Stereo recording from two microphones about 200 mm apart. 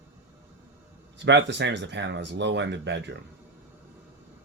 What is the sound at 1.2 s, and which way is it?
Speech, 60° right (ahead or behind).